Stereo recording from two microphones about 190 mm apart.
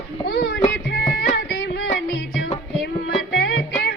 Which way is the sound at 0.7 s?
60° left (ahead or behind).